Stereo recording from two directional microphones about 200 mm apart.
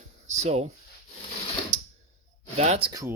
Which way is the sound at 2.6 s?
30° right (ahead or behind).